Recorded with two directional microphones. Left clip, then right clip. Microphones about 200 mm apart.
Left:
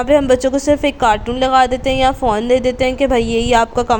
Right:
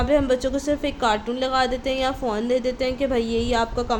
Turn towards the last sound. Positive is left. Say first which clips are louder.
# left 9 dB
turn(degrees=40)  # may be behind; listen again after turning